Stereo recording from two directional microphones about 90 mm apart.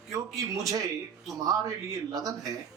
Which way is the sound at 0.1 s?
40° right (ahead or behind).